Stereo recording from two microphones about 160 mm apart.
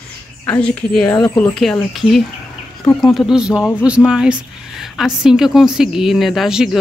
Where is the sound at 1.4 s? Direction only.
5° left (ahead or behind).